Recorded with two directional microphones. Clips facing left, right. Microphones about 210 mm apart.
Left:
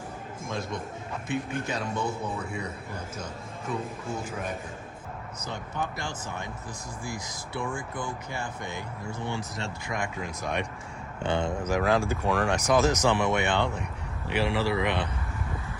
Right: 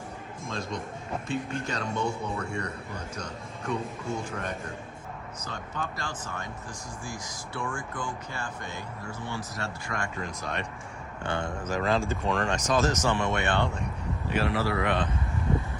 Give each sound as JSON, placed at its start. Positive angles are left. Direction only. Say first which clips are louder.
{"t": 1.5, "sound": "a man's voice", "louder": "left 1 dB", "side_deg": 5}
{"t": 5.5, "sound": "speech", "louder": "left 3 dB", "side_deg": 15}
{"t": 7.9, "sound": "speech", "louder": "left 1 dB", "side_deg": 20}